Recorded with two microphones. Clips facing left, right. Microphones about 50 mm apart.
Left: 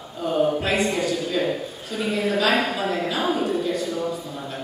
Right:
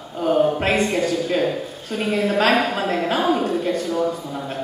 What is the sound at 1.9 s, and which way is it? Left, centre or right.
Speech, right.